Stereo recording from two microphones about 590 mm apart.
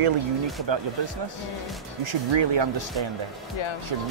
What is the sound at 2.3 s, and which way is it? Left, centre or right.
Speech, right.